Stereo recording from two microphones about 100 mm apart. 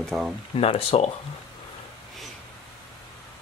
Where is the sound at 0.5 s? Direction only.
85° left.